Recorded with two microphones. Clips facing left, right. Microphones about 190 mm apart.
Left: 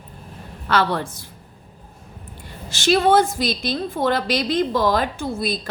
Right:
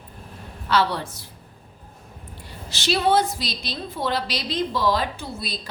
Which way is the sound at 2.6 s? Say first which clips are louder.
Left 5 dB; 50° left (ahead or behind).